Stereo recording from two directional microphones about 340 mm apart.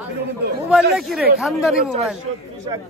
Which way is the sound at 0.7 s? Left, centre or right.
Centre.